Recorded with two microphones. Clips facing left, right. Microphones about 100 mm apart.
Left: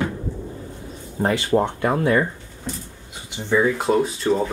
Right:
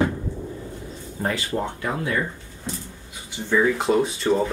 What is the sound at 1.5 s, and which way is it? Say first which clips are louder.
Speech: left 8 dB; 60° left (ahead or behind).